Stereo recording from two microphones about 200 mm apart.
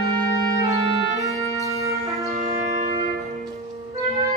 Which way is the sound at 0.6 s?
15° right (ahead or behind).